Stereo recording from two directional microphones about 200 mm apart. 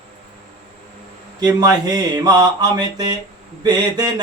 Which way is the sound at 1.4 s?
20° right (ahead or behind).